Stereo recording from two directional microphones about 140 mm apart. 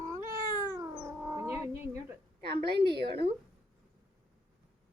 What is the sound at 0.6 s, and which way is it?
Cat, 25° right (ahead or behind).